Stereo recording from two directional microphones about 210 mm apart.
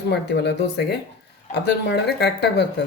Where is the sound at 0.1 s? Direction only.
55° left (ahead or behind).